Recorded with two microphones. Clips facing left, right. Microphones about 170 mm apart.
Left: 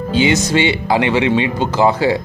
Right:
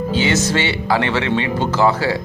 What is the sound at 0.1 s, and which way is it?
Music, 15° left (ahead or behind).